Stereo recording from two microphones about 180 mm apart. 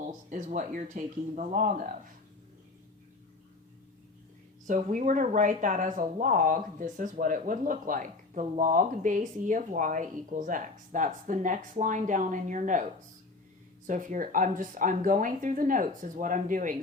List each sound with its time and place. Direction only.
0.3 s speech: 45° right (ahead or behind)
4.6 s speech: 45° right (ahead or behind)